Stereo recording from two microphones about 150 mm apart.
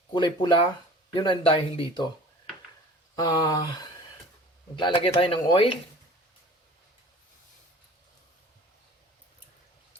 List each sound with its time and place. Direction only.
0.1 s speech: 30° left (ahead or behind)
3.2 s speech: 30° left (ahead or behind)